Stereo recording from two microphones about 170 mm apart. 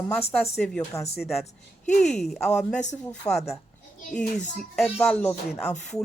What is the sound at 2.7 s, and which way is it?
Speech, 45° left (ahead or behind).